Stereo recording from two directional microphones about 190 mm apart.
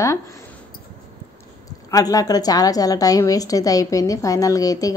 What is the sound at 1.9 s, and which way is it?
A woman's voice, 20° left (ahead or behind).